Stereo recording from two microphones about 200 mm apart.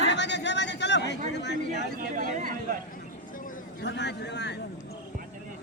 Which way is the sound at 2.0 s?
45° right (ahead or behind).